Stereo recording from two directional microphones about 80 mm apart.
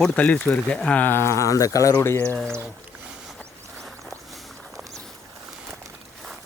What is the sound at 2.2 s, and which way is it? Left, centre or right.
Speech, centre.